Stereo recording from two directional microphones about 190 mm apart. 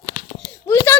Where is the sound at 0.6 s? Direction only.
10° left (ahead or behind).